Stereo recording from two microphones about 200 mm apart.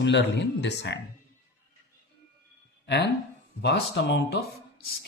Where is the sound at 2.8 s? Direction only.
55° left (ahead or behind).